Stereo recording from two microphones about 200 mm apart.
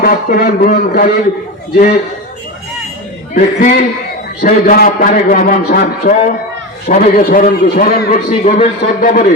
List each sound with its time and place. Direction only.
0.0 s a man's voice: 50° left (ahead or behind)
3.3 s a man's voice: 45° left (ahead or behind)
8.3 s a man's voice: 40° left (ahead or behind)